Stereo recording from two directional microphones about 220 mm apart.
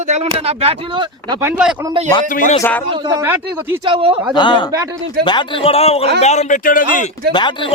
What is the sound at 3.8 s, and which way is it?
Speech, 25° right (ahead or behind).